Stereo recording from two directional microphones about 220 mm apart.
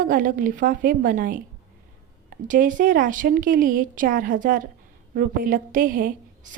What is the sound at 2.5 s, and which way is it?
Speech, 35° right (ahead or behind).